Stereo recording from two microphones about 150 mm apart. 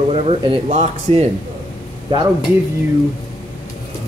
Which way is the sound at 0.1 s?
40° right (ahead or behind).